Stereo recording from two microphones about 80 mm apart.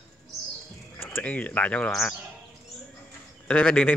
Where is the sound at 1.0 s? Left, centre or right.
Left.